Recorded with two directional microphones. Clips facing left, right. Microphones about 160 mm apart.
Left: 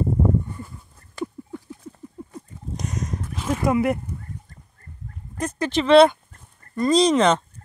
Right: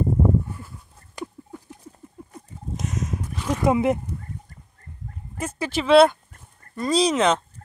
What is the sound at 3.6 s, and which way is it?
Fowl, 20° right (ahead or behind).